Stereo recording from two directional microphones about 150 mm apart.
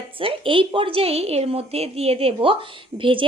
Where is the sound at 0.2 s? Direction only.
35° right (ahead or behind).